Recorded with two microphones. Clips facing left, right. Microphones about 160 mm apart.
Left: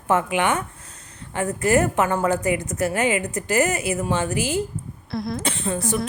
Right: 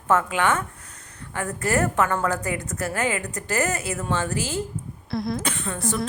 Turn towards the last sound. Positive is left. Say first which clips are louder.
# left 3 dB
turn(degrees=25)  # may be behind; listen again after turning